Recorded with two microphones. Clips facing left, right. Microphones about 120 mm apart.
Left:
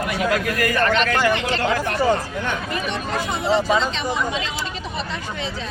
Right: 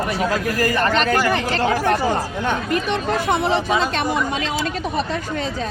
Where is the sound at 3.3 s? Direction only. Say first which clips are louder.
Left 1 dB; 60° right (ahead or behind).